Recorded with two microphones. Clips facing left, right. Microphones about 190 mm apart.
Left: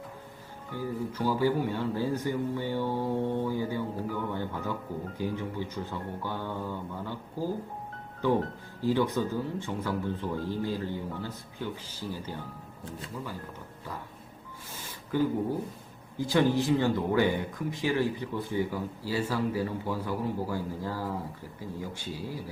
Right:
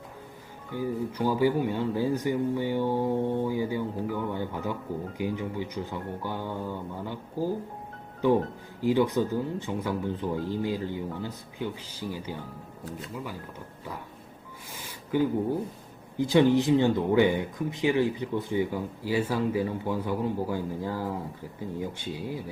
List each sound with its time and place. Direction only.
0.7 s speech: 15° right (ahead or behind)
8.8 s speech: 15° right (ahead or behind)
16.1 s speech: 20° right (ahead or behind)